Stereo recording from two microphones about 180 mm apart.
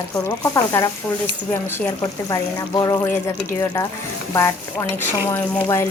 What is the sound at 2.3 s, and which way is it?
Stir, 20° left (ahead or behind).